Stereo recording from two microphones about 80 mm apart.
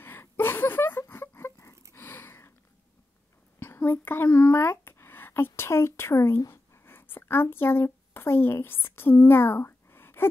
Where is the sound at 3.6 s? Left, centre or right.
Left.